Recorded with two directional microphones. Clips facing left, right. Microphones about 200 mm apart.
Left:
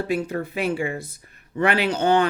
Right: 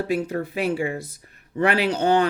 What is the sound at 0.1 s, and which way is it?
A woman's voice, 35° right (ahead or behind).